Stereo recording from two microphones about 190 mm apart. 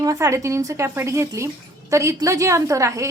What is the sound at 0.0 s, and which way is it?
A woman's voice, 15° right (ahead or behind).